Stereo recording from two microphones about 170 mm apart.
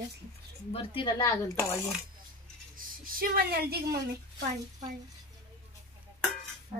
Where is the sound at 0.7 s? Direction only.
30° left (ahead or behind).